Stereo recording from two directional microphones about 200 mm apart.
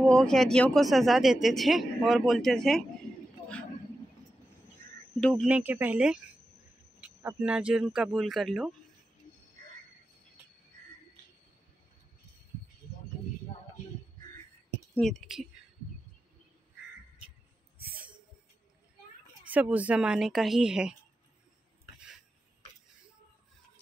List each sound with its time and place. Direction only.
0.1 s speech: centre (ahead or behind)
5.2 s speech: 5° right (ahead or behind)
15.0 s speech: centre (ahead or behind)
17.7 s a sound: 50° right (ahead or behind)
19.4 s speech: 10° right (ahead or behind)